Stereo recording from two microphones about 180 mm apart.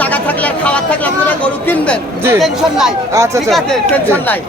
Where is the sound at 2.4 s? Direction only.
Centre (ahead or behind).